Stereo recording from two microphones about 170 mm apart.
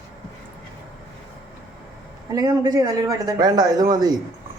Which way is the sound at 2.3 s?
20° right (ahead or behind).